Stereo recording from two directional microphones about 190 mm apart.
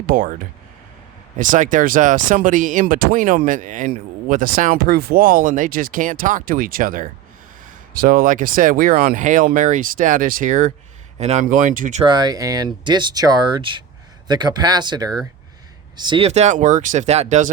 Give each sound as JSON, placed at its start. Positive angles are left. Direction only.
{"t": 0.0, "sound": "speech", "side_deg": -50}
{"t": 1.4, "sound": "speech", "side_deg": -45}
{"t": 12.0, "sound": "speech", "side_deg": -20}